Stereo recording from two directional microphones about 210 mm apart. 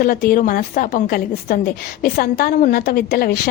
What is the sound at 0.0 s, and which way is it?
A woman's voice, 45° left (ahead or behind).